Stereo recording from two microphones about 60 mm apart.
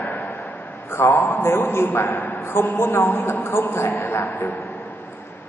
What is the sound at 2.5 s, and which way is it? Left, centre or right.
A man's voice, left.